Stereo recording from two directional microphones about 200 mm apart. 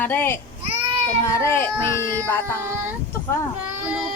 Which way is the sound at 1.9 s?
15° right (ahead or behind).